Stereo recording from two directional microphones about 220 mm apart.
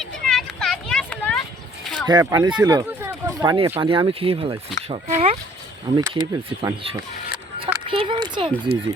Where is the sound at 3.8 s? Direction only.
25° right (ahead or behind).